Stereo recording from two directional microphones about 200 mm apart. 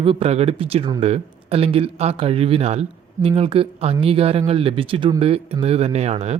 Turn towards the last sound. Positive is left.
turn(degrees=-35)  # may be behind; listen again after turning